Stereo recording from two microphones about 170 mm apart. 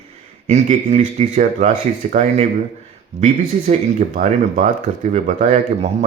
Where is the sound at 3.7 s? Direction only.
45° right (ahead or behind).